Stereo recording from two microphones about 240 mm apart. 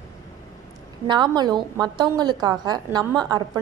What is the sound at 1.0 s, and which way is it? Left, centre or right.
A woman's voice, centre.